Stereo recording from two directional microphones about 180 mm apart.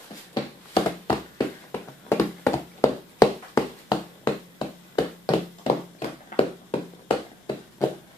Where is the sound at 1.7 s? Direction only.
15° left (ahead or behind).